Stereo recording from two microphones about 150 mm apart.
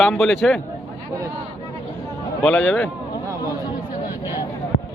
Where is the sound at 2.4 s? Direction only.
10° left (ahead or behind).